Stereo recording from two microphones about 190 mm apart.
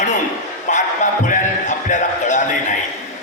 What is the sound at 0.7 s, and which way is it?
Music, 40° left (ahead or behind).